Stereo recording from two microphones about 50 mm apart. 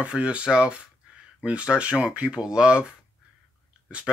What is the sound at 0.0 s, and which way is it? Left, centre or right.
Speech, right.